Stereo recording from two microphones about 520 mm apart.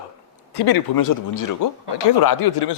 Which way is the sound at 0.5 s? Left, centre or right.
Left.